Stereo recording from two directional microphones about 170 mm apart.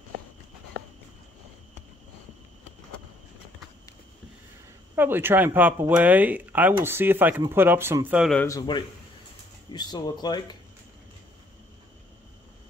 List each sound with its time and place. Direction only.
4.9 s speech: 10° right (ahead or behind)
8.4 s speech: 20° left (ahead or behind)